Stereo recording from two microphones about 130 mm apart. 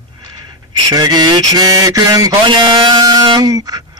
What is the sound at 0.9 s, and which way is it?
Mantra, 30° right (ahead or behind).